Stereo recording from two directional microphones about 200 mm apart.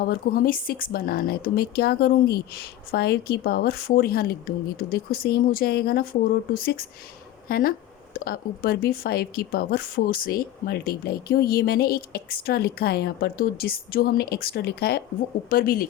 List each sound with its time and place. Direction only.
0.0 s speech: 45° left (ahead or behind)